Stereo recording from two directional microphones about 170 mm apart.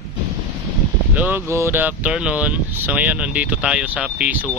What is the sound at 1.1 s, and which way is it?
Speech, 10° right (ahead or behind).